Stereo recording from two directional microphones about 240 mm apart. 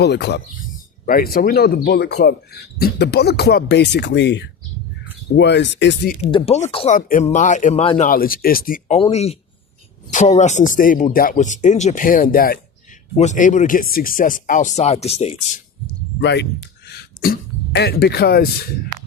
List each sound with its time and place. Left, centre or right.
0.0 s speech: left
6.3 s speech: left
16.2 s speech: left